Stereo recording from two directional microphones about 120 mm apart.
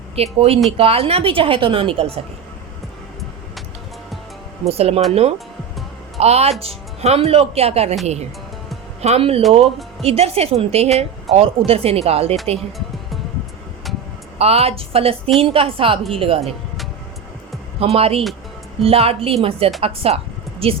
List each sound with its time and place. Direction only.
0.2 s a woman's voice: 55° right (ahead or behind)
4.7 s speech: 60° right (ahead or behind)
6.1 s speech: 60° right (ahead or behind)
9.0 s a woman's voice: 60° right (ahead or behind)
14.3 s a woman's voice: 60° right (ahead or behind)
17.7 s a woman's voice: 55° right (ahead or behind)